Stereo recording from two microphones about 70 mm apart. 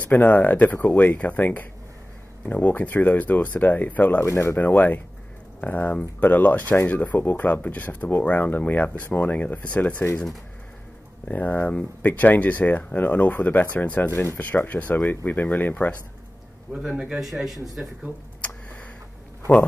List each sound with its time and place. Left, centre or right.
0.0 s speech: left
4.2 s speech: left
4.6 s speech: left
11.2 s speech: left
14.1 s speech: left
14.4 s speech: left
16.7 s speech: centre
17.8 s speech: right